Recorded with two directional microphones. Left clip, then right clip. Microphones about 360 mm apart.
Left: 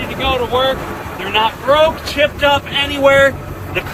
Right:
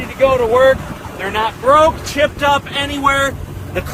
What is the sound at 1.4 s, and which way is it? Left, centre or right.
Speech, centre.